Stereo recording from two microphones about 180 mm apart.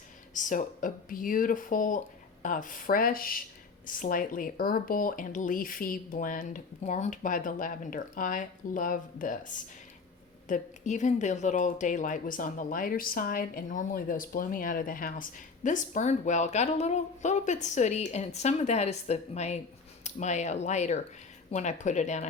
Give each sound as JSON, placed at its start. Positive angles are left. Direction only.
{"t": 0.3, "sound": "speech", "side_deg": 45}